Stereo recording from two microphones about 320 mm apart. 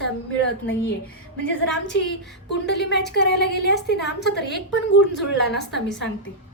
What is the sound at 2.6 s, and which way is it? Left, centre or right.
A woman's voice, left.